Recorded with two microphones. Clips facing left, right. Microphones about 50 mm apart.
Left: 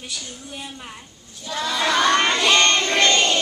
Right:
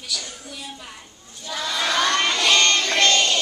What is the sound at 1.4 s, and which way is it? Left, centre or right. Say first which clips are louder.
Crowd: left 2 dB; centre.